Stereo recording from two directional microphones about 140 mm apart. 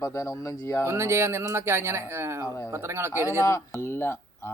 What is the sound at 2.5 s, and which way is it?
Speech, 20° left (ahead or behind).